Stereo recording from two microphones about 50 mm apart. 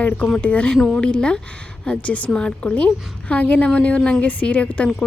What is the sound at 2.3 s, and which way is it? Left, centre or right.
A woman's voice, centre.